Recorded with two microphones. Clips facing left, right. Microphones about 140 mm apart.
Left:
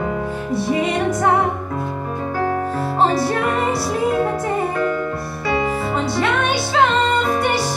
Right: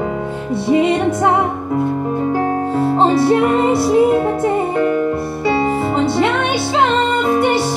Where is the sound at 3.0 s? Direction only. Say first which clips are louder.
Right 4 dB; 25° right (ahead or behind).